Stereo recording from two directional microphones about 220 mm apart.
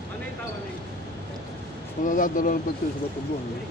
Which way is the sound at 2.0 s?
35° left (ahead or behind).